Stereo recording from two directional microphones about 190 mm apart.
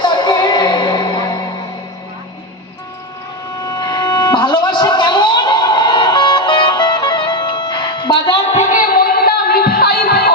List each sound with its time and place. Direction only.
0.0 s music: 25° left (ahead or behind)
3.7 s music: 20° left (ahead or behind)
8.5 s music: 45° left (ahead or behind)